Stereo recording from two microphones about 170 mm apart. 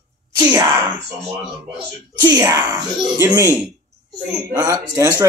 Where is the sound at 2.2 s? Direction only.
20° right (ahead or behind).